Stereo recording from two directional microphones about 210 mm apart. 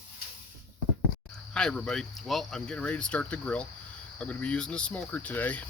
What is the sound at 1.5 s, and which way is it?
Speech, 5° left (ahead or behind).